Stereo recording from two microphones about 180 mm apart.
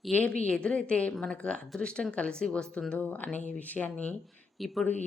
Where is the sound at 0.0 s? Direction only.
5° left (ahead or behind).